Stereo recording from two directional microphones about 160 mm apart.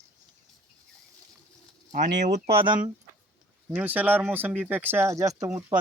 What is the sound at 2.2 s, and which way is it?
Speech, 40° right (ahead or behind).